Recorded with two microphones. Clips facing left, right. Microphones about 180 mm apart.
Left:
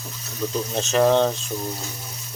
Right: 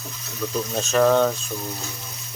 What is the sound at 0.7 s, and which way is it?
Speech, 20° left (ahead or behind).